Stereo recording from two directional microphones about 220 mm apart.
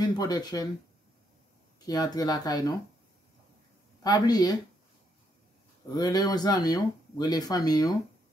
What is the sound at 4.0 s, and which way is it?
Speech, 15° left (ahead or behind).